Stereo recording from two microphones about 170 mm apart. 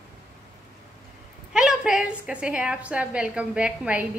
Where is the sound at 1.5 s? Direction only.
5° right (ahead or behind).